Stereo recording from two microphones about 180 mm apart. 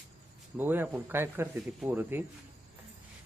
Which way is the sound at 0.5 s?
10° right (ahead or behind).